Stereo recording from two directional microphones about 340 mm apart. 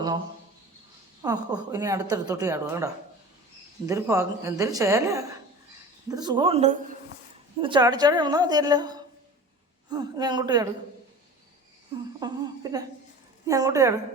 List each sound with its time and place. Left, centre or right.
1.2 s speech: centre
12.2 s speech: centre